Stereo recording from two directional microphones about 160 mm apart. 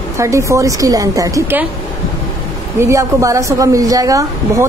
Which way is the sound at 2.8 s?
20° right (ahead or behind).